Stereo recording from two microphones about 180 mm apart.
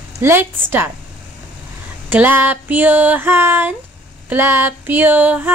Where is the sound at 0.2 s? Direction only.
15° right (ahead or behind).